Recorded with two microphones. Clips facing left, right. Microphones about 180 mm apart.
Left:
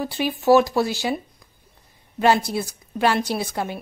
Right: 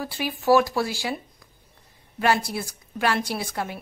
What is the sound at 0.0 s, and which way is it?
A woman's voice, 20° left (ahead or behind).